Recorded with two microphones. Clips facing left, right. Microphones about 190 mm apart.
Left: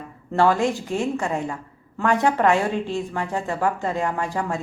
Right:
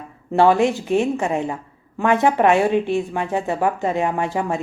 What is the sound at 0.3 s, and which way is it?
Speech, 20° right (ahead or behind).